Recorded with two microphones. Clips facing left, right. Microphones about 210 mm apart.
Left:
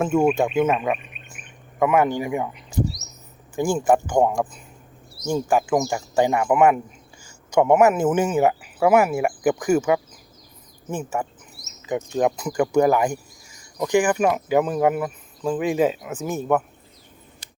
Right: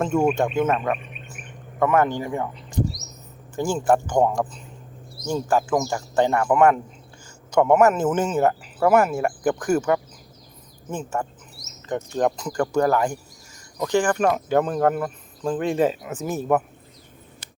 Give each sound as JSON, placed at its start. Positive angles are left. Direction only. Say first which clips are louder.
{"t": 0.0, "sound": "speech", "louder": "left 2 dB", "side_deg": 5}